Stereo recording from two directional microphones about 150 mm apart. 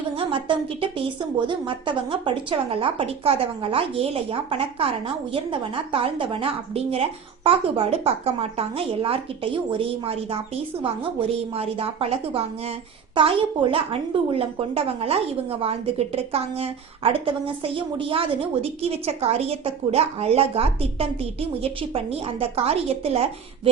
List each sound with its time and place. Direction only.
0.2 s a woman's voice: 35° right (ahead or behind)